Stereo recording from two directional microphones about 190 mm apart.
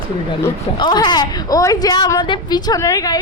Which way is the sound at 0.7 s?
20° left (ahead or behind).